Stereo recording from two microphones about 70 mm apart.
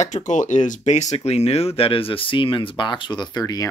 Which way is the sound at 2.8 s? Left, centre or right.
Left.